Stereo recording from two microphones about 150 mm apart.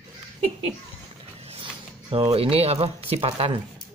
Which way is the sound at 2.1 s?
40° right (ahead or behind).